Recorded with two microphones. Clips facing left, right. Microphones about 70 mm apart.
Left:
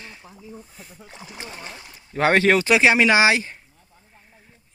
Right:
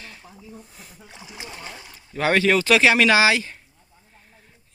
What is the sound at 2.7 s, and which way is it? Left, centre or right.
Speech, centre.